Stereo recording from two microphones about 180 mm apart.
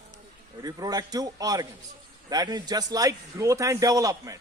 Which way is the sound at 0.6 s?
20° right (ahead or behind).